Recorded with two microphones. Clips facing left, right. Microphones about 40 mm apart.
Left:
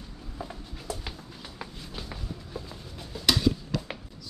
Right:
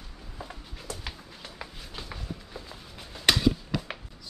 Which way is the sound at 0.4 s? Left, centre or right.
Centre.